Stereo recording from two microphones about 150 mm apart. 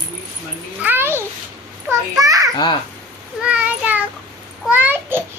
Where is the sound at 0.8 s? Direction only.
15° right (ahead or behind).